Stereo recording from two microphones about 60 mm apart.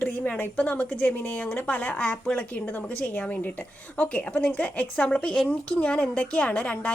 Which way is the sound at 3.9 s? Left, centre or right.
Left.